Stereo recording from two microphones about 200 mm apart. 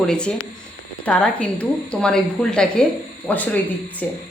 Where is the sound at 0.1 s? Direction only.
5° left (ahead or behind).